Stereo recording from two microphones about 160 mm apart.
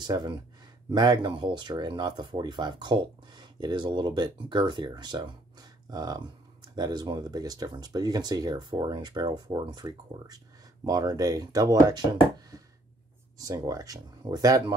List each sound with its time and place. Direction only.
0.0 s speech: 25° right (ahead or behind)